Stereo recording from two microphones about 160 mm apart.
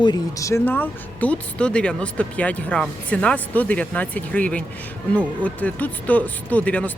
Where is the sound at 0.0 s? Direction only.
25° left (ahead or behind).